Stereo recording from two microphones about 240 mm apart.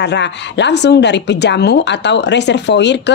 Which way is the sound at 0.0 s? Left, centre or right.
Left.